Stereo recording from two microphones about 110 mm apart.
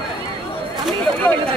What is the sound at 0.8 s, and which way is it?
Speech, 10° left (ahead or behind).